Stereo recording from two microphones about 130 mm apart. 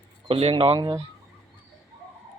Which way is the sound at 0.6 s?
40° right (ahead or behind).